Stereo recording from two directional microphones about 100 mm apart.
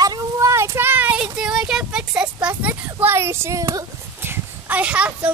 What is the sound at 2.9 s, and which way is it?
Speech, 25° right (ahead or behind).